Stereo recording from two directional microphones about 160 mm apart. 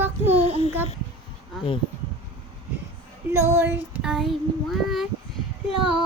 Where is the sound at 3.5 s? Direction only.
15° right (ahead or behind).